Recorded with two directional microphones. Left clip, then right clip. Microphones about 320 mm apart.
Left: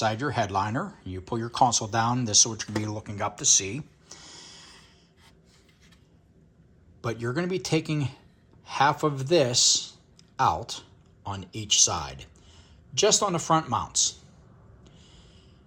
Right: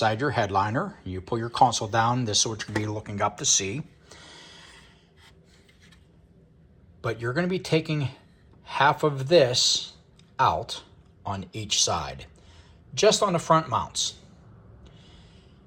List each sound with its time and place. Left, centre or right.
0.0 s speech: centre
7.0 s speech: centre
14.9 s a sound: centre